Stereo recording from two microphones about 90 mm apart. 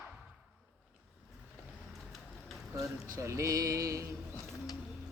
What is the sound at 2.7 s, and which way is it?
Speech, 35° right (ahead or behind).